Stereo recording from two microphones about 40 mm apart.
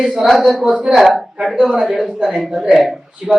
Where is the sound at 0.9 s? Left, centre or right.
Centre.